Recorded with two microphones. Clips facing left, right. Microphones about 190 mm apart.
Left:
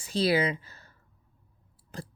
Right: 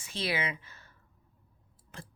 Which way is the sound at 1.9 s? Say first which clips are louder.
Left 7 dB; 35° left (ahead or behind).